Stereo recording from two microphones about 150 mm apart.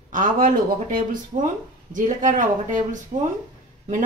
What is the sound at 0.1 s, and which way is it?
A woman's voice, 65° right (ahead or behind).